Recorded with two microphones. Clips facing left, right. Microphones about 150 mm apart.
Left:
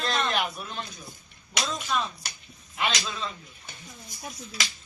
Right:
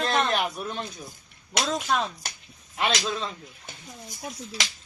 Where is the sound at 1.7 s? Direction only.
75° right (ahead or behind).